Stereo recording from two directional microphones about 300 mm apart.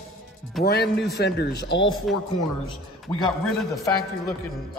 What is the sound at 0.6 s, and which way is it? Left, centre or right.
Speech, centre.